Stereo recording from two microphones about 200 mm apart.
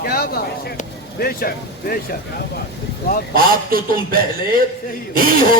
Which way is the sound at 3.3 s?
45° right (ahead or behind).